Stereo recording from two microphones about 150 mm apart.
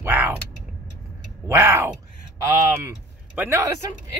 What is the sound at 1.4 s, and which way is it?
Speech, 15° right (ahead or behind).